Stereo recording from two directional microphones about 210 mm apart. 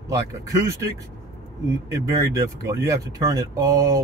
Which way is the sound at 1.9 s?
15° right (ahead or behind).